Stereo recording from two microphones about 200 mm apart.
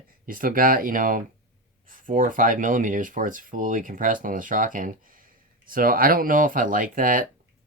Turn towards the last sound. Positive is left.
turn(degrees=-45)  # may be behind; listen again after turning